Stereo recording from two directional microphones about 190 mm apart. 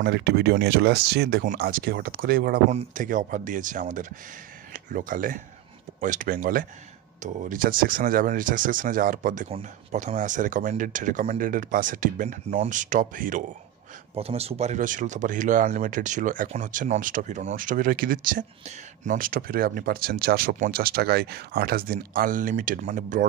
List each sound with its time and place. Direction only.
0.0 s speech: 55° right (ahead or behind)
14.1 s speech: 30° right (ahead or behind)